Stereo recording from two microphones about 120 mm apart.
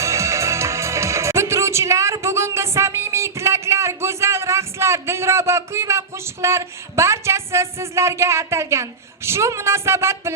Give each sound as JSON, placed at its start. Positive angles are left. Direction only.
{"t": 0.0, "sound": "music", "side_deg": -25}